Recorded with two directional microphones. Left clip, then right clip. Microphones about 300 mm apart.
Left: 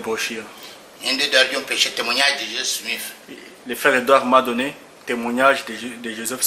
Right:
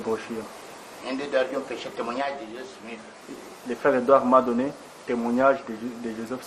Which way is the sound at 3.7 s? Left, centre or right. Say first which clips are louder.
Left 4 dB; centre.